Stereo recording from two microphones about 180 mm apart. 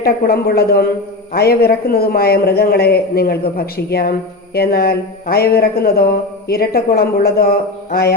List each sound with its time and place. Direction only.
0.0 s a man's voice: 60° left (ahead or behind)